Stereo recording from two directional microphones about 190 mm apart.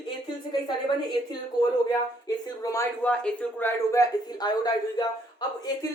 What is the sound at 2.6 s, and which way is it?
Speech, 15° left (ahead or behind).